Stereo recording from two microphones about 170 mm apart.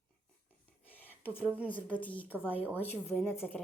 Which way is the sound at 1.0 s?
10° left (ahead or behind).